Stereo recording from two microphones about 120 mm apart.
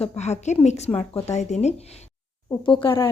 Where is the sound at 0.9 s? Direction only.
55° left (ahead or behind).